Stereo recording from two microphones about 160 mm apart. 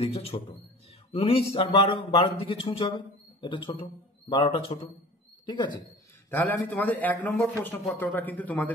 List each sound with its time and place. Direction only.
0.0 s speech: 40° left (ahead or behind)
6.3 s a man's voice: 10° left (ahead or behind)